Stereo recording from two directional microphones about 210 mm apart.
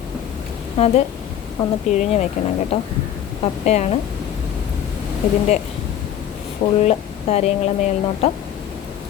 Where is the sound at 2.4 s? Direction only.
35° left (ahead or behind).